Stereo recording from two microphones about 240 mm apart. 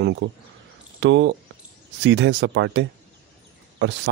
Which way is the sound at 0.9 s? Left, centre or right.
Right.